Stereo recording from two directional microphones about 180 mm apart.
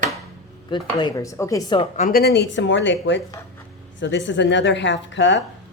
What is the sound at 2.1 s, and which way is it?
Speech, 60° left (ahead or behind).